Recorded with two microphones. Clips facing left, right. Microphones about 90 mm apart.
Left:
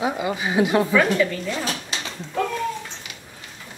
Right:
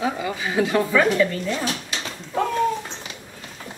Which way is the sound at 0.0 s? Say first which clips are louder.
Left 1 dB; 20° left (ahead or behind).